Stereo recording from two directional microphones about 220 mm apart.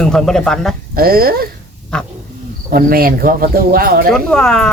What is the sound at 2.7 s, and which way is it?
Speech, 40° right (ahead or behind).